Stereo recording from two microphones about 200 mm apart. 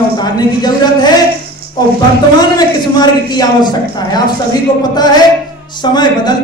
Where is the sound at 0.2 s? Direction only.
20° left (ahead or behind).